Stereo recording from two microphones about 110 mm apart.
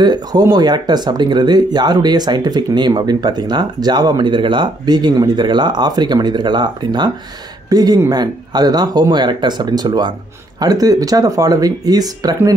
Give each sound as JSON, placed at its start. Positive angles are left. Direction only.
{"t": 0.0, "sound": "speech", "side_deg": -40}